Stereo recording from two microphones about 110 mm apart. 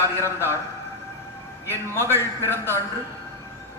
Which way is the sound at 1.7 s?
20° left (ahead or behind).